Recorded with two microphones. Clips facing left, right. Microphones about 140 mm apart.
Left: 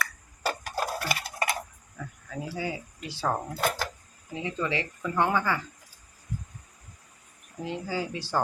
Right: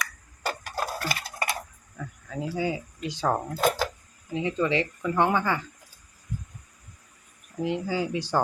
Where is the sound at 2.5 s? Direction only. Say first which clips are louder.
Right 6 dB; 20° right (ahead or behind).